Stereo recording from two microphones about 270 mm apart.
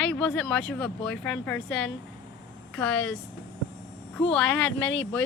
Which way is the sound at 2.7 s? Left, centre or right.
Centre.